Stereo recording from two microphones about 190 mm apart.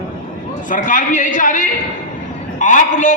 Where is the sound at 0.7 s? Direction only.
45° left (ahead or behind).